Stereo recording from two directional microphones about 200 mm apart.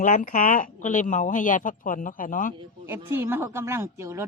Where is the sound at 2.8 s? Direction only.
10° right (ahead or behind).